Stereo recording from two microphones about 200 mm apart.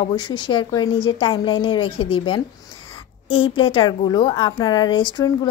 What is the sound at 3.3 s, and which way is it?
Speech, 80° left.